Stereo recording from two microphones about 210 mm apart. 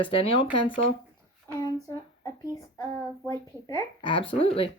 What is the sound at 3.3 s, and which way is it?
Speech, 15° left (ahead or behind).